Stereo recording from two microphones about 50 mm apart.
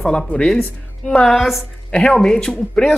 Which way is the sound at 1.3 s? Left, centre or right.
Centre.